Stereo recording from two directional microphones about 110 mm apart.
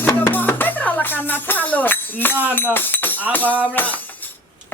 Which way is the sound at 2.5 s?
20° left (ahead or behind).